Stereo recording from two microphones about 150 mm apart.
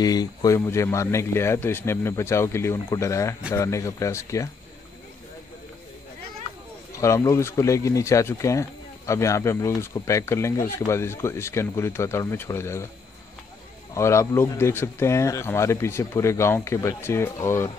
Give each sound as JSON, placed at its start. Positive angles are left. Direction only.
{"t": 0.0, "sound": "speech", "side_deg": 25}
{"t": 6.9, "sound": "speech", "side_deg": 20}
{"t": 13.9, "sound": "speech", "side_deg": 20}